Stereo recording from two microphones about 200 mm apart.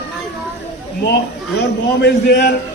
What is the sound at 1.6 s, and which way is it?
Speech, 55° left (ahead or behind).